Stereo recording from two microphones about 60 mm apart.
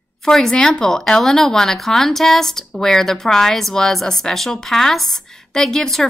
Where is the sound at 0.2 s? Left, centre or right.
Centre.